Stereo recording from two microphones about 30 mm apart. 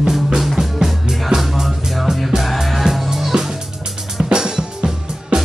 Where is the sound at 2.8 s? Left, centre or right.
Centre.